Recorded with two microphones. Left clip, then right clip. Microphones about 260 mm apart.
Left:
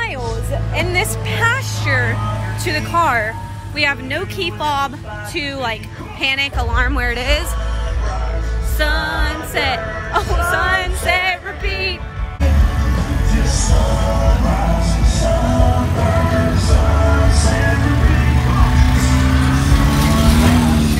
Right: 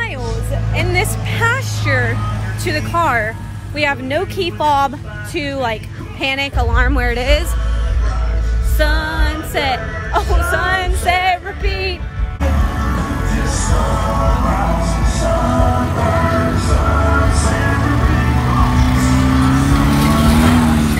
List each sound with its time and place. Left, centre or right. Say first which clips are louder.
0.7 s vehicle: right 1 dB; centre
2.6 s speech: even; centre
8.7 s music: even; centre
10.5 s speech: even; centre
12.4 s music: right 2 dB; centre
16.3 s music: right 2 dB; right
16.6 s music: right 2 dB; centre
17.9 s music: right 2 dB; right
20.1 s music: right 1 dB; right